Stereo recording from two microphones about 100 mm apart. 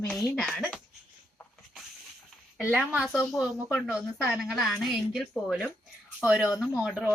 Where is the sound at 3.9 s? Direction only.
5° right (ahead or behind).